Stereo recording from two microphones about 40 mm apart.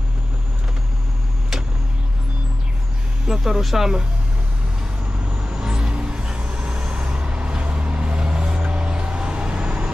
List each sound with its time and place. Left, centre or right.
3.3 s speech: centre
5.4 s vehicle: centre
7.2 s vehicle: right